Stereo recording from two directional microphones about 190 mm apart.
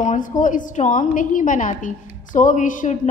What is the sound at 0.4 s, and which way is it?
A woman's voice, 45° left (ahead or behind).